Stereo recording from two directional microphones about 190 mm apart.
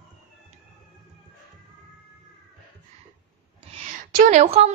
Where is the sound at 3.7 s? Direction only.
40° right (ahead or behind).